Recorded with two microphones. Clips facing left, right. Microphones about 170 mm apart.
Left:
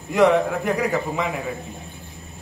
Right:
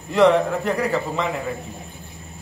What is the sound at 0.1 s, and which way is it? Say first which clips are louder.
A man's voice: right 1 dB; 15° left (ahead or behind).